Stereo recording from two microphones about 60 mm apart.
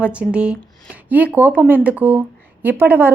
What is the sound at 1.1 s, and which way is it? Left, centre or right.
A woman's voice, right.